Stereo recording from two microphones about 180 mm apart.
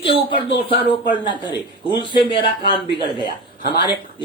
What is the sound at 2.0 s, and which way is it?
Speech, 25° left (ahead or behind).